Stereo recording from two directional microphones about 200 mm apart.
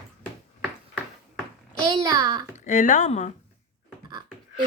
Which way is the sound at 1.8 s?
20° right (ahead or behind).